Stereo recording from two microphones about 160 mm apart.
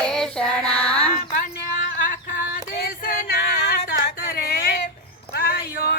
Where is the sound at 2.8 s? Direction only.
60° left (ahead or behind).